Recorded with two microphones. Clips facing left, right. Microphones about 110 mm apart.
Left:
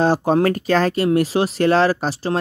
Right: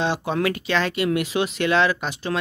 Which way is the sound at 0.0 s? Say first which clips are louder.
Left 7 dB; 40° left (ahead or behind).